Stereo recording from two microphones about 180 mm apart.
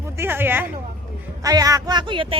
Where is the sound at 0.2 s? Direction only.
10° right (ahead or behind).